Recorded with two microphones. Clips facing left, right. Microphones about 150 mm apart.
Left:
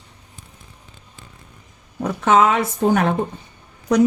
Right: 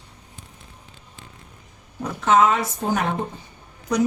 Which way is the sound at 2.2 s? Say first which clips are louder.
Left 2 dB; 60° left (ahead or behind).